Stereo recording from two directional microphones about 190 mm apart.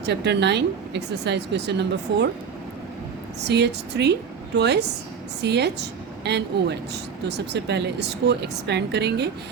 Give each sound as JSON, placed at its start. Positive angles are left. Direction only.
{"t": 0.0, "sound": "a woman's voice", "side_deg": -60}
{"t": 3.4, "sound": "a woman's voice", "side_deg": -65}